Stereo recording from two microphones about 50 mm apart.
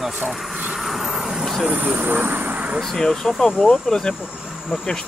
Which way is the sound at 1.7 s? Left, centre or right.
Right.